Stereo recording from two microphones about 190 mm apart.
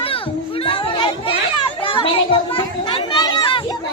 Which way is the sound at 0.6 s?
25° left (ahead or behind).